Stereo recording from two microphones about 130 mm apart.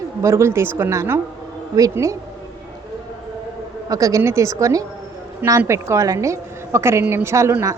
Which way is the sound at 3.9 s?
25° right (ahead or behind).